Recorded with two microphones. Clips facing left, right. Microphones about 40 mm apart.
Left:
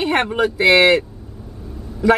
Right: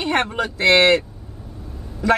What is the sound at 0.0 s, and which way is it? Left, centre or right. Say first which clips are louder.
Speech: left 3 dB; centre.